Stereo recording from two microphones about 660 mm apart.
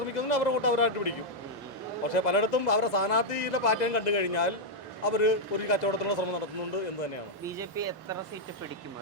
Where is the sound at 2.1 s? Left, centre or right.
Left.